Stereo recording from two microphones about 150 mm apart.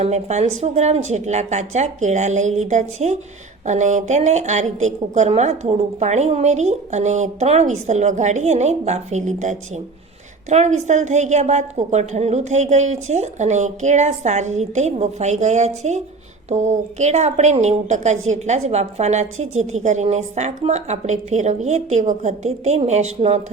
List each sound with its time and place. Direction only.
0.0 s a woman's voice: 50° right (ahead or behind)